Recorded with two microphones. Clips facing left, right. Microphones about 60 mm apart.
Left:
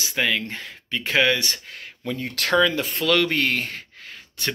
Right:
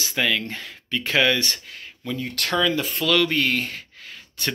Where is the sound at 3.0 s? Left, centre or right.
Left.